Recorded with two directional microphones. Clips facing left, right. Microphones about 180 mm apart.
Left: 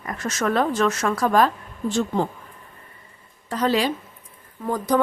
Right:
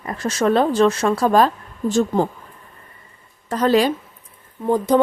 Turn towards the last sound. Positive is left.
turn(degrees=-25)  # may be behind; listen again after turning